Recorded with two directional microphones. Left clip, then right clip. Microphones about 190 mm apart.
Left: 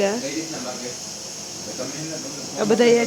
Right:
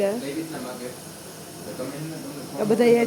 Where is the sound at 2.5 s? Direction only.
Centre (ahead or behind).